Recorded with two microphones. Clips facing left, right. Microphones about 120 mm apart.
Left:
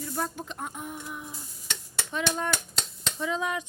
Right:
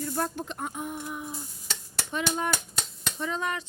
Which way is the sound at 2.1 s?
5° right (ahead or behind).